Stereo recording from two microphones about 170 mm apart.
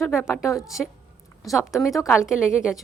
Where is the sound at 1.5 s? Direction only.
Centre (ahead or behind).